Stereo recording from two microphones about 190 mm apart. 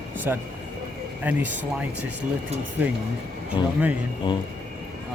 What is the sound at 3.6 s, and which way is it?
Speech, 25° left (ahead or behind).